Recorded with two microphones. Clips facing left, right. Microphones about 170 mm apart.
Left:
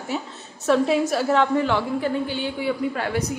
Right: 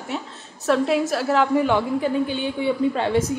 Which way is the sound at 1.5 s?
15° right (ahead or behind).